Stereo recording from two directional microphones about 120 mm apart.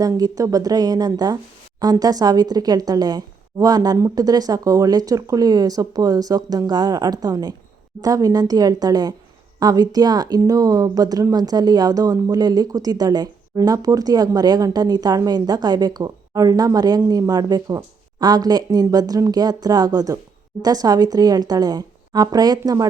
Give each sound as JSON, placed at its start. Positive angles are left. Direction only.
{"t": 0.0, "sound": "speech", "side_deg": -30}